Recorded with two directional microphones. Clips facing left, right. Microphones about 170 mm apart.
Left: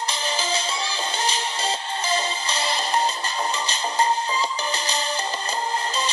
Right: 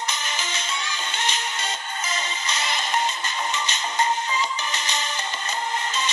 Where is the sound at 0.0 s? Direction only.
30° left (ahead or behind).